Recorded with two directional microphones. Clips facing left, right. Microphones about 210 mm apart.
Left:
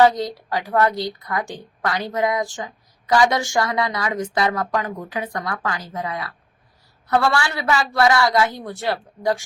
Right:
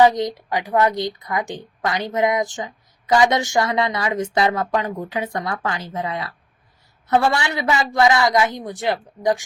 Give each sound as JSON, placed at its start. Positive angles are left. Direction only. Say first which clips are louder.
{"t": 0.0, "sound": "a woman's voice", "louder": "right 1 dB", "side_deg": -20}